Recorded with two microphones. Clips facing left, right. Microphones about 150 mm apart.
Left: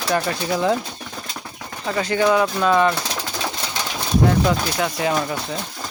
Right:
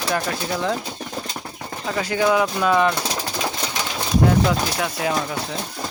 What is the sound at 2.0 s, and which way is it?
Speech, 5° right (ahead or behind).